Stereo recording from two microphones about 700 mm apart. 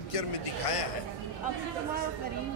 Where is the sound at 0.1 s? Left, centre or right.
Left.